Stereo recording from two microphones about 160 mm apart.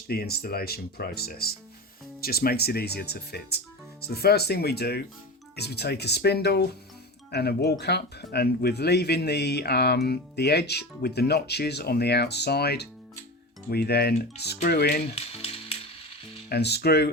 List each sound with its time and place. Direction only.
0.1 s speech: 75° left (ahead or behind)
15.1 s music: 40° left (ahead or behind)
16.5 s speech: 90° left